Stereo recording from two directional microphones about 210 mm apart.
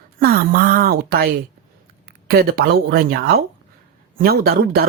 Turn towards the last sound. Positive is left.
turn(degrees=-50)  # may be behind; listen again after turning